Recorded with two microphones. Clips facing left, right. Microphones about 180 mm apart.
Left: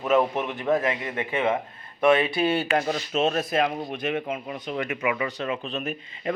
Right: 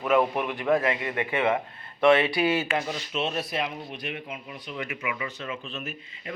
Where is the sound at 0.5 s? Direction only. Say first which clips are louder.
Even; 20° left (ahead or behind).